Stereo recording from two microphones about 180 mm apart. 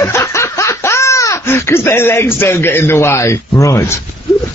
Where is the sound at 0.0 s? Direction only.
15° left (ahead or behind).